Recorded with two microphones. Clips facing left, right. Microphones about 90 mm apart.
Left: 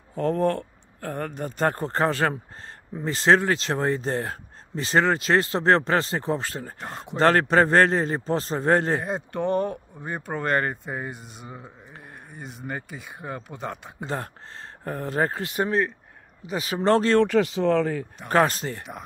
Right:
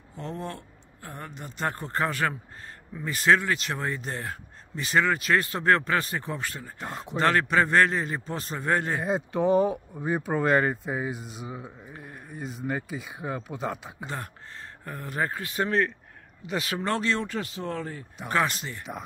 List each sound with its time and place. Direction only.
0.1 s speech: 55° left (ahead or behind); by 6.7 s 30° left (ahead or behind)
6.8 s speech: centre (ahead or behind)
7.2 s speech: 35° left (ahead or behind)
9.0 s speech: centre (ahead or behind)
14.0 s speech: 35° left (ahead or behind)
15.4 s speech: 20° left (ahead or behind)
16.4 s speech: 5° left (ahead or behind)
16.7 s speech: 35° left (ahead or behind)
17.2 s speech: 90° left
18.3 s speech: 40° left (ahead or behind)